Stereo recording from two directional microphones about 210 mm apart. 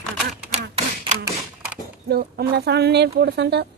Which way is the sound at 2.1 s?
50° right (ahead or behind).